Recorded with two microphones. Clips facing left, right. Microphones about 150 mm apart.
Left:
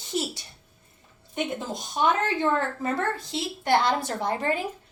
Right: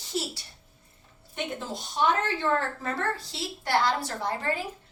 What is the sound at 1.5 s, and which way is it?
A woman's voice, 15° left (ahead or behind).